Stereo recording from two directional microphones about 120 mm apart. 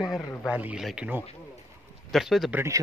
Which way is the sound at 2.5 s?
25° right (ahead or behind).